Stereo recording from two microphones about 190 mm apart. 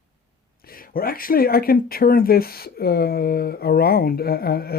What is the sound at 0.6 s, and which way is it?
Speech, 50° left (ahead or behind).